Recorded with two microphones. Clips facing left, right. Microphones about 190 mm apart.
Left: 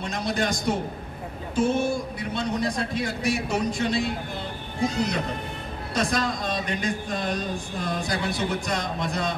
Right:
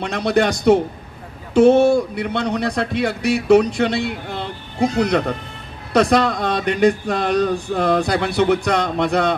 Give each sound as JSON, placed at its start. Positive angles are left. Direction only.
{"t": 0.0, "sound": "speech", "side_deg": -70}